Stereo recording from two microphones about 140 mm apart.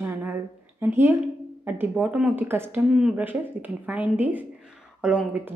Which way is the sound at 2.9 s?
5° right (ahead or behind).